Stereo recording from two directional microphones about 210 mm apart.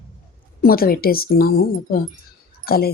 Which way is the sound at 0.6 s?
45° left (ahead or behind).